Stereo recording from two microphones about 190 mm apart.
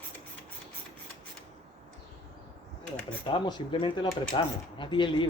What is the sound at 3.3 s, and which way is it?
Speech, 25° left (ahead or behind).